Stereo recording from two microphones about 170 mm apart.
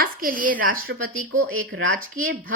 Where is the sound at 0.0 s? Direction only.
55° right (ahead or behind).